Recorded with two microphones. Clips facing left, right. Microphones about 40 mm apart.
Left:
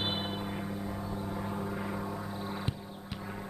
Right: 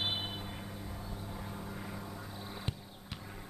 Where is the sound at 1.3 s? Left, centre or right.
Left.